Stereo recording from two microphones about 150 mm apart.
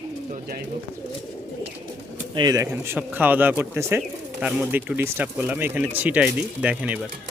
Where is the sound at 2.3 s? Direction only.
25° right (ahead or behind).